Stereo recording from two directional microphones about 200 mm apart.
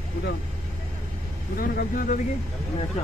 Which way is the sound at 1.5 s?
45° left (ahead or behind).